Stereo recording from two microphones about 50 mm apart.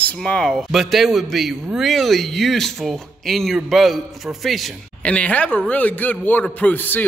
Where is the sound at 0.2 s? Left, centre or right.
Centre.